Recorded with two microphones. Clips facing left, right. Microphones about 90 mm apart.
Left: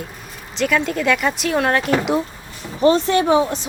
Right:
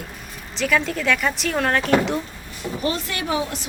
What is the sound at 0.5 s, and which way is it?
Speech, centre (ahead or behind).